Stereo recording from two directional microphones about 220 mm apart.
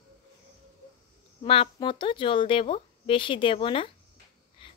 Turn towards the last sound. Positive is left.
turn(degrees=25)  # may be behind; listen again after turning